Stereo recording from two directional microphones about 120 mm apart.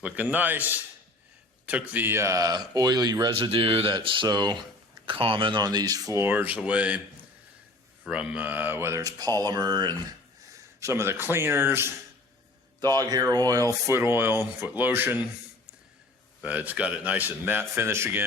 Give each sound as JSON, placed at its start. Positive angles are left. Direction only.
{"t": 0.0, "sound": "speech", "side_deg": -15}
{"t": 3.3, "sound": "speech", "side_deg": -45}
{"t": 5.0, "sound": "speech", "side_deg": -45}
{"t": 6.2, "sound": "speech", "side_deg": -15}
{"t": 8.0, "sound": "speech", "side_deg": -10}
{"t": 10.1, "sound": "speech", "side_deg": -25}
{"t": 12.8, "sound": "speech", "side_deg": -35}